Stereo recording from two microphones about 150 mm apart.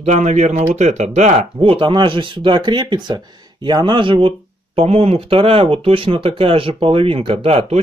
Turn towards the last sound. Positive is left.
turn(degrees=-40)  # may be behind; listen again after turning